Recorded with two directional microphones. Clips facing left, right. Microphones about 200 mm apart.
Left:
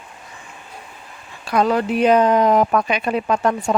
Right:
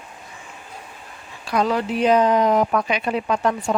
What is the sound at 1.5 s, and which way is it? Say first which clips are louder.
Speech: left 3 dB; 55° left (ahead or behind).